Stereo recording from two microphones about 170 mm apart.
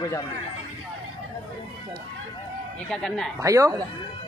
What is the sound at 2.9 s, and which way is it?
Speech, 5° left (ahead or behind).